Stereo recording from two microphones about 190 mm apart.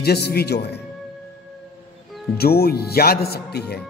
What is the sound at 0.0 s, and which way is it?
Speech, 55° left (ahead or behind).